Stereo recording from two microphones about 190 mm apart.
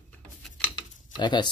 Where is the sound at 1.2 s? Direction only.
25° left (ahead or behind).